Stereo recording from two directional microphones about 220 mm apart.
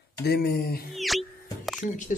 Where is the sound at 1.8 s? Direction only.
35° left (ahead or behind).